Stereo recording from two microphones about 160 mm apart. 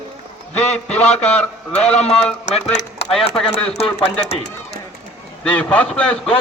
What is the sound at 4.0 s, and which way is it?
Speech, 35° left (ahead or behind).